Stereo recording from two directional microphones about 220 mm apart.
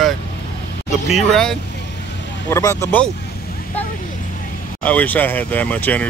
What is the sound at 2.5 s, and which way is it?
Speech, 15° left (ahead or behind).